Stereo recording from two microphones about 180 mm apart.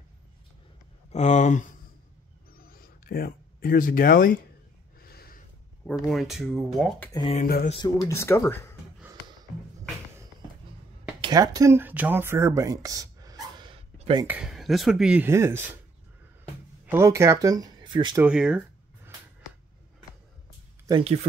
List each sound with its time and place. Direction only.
1.1 s speech: 40° left (ahead or behind)
2.5 s a sound: 55° left (ahead or behind)
5.9 s speech: centre (ahead or behind)
7.0 s speech: 20° left (ahead or behind)
7.3 s a sound: 55° left (ahead or behind)
7.8 s speech: 15° left (ahead or behind)
11.1 s speech: 20° right (ahead or behind)
13.6 s a sound: 30° right (ahead or behind)
14.2 s speech: 5° right (ahead or behind)
16.8 s speech: 15° right (ahead or behind)
18.2 s speech: 5° right (ahead or behind)
21.0 s speech: 35° right (ahead or behind)